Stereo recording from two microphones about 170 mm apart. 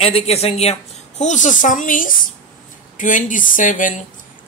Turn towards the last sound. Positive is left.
turn(degrees=50)  # may be behind; listen again after turning